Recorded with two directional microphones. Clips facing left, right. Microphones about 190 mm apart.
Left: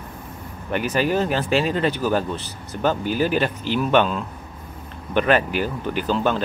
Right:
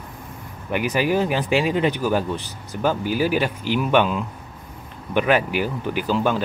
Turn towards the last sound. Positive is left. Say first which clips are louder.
# even
turn(degrees=-10)  # may be behind; listen again after turning